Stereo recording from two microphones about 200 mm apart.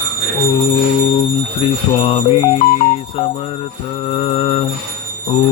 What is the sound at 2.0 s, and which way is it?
Mantra, 25° left (ahead or behind).